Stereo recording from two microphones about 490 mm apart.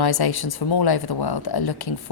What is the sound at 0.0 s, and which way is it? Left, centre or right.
A woman's voice, left.